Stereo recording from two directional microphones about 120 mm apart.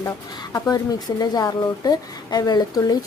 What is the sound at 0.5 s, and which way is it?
Speech, 30° left (ahead or behind).